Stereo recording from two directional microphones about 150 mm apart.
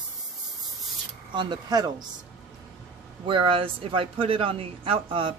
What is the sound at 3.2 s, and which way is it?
Speech, 35° right (ahead or behind).